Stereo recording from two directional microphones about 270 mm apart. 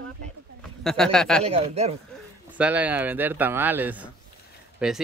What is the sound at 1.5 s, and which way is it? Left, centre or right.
Speech, right.